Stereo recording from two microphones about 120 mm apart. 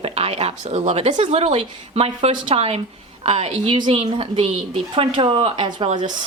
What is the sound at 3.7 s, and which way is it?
A woman's voice, 40° right (ahead or behind).